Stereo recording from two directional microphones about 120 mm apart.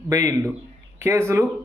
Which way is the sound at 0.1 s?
25° right (ahead or behind).